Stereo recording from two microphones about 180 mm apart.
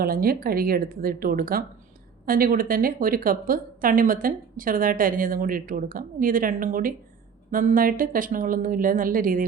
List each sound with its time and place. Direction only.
0.0 s a woman's voice: 55° right (ahead or behind)